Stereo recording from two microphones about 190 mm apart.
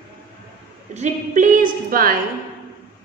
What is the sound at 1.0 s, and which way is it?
A woman's voice, 40° right (ahead or behind).